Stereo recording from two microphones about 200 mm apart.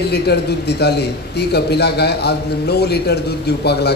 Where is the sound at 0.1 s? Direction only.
55° left (ahead or behind).